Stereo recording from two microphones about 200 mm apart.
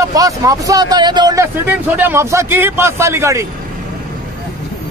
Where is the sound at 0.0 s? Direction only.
20° right (ahead or behind).